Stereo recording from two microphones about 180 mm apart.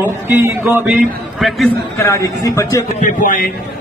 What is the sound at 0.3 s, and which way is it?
Speech, 10° right (ahead or behind).